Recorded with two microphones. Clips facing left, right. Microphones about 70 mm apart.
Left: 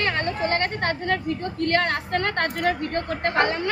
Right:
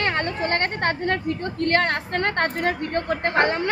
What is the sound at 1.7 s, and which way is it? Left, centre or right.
Speech, right.